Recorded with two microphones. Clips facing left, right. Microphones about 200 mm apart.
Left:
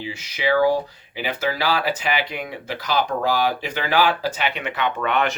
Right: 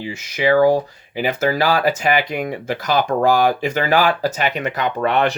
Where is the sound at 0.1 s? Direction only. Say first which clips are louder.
Right 5 dB; 45° right (ahead or behind).